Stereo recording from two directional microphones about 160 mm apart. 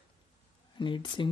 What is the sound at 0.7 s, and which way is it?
Speech, 30° left (ahead or behind).